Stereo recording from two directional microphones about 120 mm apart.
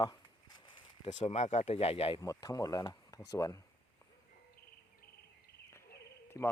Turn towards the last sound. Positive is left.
turn(degrees=30)  # may be behind; listen again after turning